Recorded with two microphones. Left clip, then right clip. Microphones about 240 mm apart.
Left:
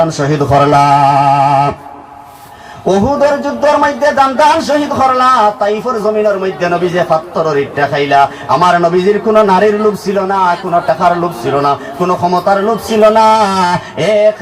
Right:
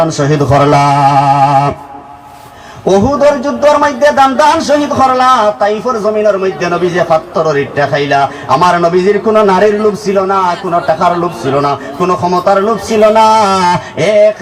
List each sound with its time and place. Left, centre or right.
0.1 s a man's voice: right
2.8 s a man's voice: right